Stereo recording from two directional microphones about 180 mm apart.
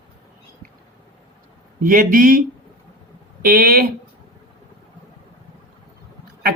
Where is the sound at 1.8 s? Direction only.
50° right (ahead or behind).